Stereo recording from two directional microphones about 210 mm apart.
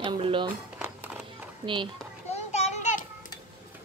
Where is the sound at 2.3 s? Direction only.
30° left (ahead or behind).